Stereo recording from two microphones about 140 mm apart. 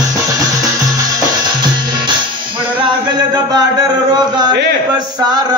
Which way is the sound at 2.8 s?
30° right (ahead or behind).